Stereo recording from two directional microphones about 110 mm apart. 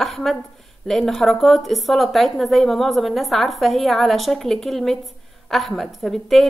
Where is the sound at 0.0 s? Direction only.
Centre (ahead or behind).